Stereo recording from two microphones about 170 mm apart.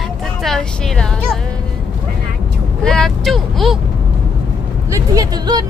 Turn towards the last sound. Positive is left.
turn(degrees=-25)  # may be behind; listen again after turning